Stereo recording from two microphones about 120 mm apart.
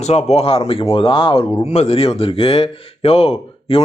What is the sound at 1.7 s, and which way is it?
Speech, 65° left (ahead or behind).